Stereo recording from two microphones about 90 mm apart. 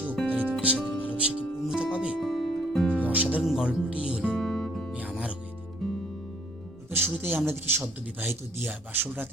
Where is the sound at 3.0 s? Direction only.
15° right (ahead or behind).